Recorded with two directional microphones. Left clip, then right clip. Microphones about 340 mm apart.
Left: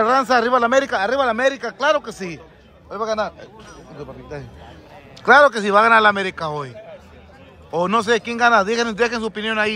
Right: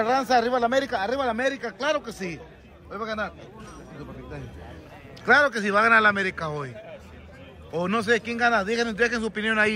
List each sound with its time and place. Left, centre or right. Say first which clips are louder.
0.0 s a man's voice: left 6 dB; centre
5.2 s a man's voice: left 7 dB; centre